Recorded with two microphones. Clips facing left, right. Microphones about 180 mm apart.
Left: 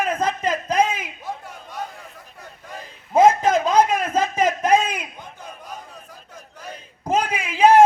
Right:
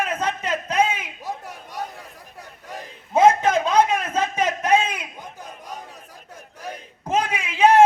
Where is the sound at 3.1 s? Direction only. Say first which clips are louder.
Left 1 dB; 35° left (ahead or behind).